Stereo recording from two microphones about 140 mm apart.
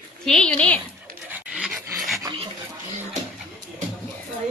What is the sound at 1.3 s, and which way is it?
Dog, 10° right (ahead or behind).